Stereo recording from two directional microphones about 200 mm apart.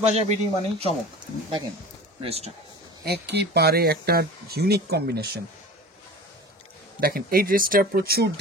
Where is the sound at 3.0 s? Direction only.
55° right (ahead or behind).